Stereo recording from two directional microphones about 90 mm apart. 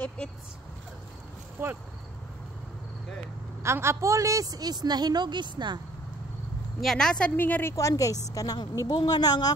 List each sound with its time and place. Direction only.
0.2 s speech: 10° left (ahead or behind)
1.6 s speech: 20° right (ahead or behind)
3.6 s a woman's voice: 30° right (ahead or behind); by 5.8 s 55° right (ahead or behind)
6.8 s speech: 5° left (ahead or behind)
7.3 s a woman's voice: 20° left (ahead or behind)
7.7 s a woman's voice: 40° left (ahead or behind)